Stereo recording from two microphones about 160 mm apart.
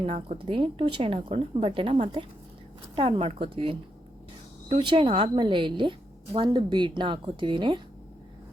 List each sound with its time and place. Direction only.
0.0 s a woman's voice: 45° right (ahead or behind)